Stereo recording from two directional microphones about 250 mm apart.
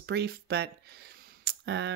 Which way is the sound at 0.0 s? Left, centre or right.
Right.